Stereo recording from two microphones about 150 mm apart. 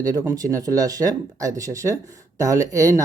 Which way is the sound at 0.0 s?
25° right (ahead or behind).